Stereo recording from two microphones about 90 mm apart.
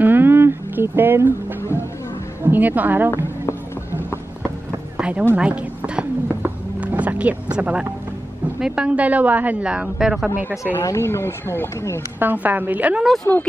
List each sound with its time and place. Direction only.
0.0 s a sound: 25° right (ahead or behind)
2.4 s a woman's voice: 20° right (ahead or behind)
4.9 s music: 10° right (ahead or behind)
8.5 s a woman's voice: 10° right (ahead or behind)
10.7 s speech: 30° left (ahead or behind)
12.2 s a woman's voice: 20° right (ahead or behind)
13.3 s speech: 30° left (ahead or behind)